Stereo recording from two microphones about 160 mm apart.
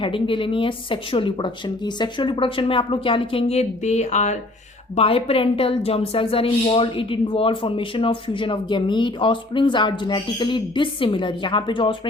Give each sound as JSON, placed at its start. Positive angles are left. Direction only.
{"t": 0.0, "sound": "a woman's voice", "side_deg": 30}